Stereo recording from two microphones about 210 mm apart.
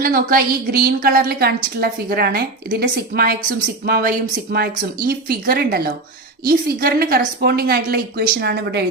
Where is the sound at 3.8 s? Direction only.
45° right (ahead or behind).